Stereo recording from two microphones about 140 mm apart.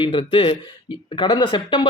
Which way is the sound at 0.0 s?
40° left (ahead or behind).